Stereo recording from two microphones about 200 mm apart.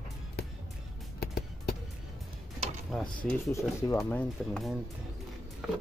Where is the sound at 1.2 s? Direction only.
50° left (ahead or behind).